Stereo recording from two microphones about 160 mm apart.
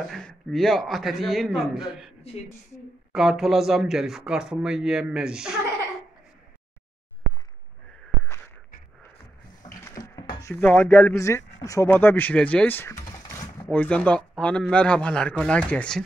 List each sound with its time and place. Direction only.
0.1 s speech: 5° left (ahead or behind)
9.8 s dishes: 20° left (ahead or behind)
10.4 s speech: 10° left (ahead or behind)
13.7 s speech: 10° left (ahead or behind)